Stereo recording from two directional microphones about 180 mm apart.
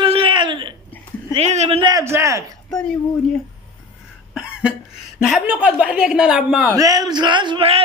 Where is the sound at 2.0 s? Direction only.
15° right (ahead or behind).